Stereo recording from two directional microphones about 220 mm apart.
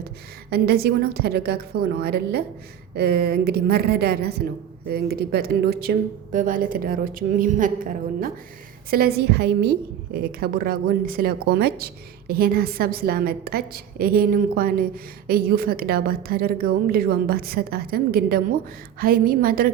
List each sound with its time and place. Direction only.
0.5 s a woman's voice: 45° right (ahead or behind)